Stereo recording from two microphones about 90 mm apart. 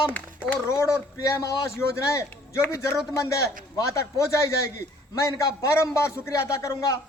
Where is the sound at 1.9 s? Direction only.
35° left (ahead or behind).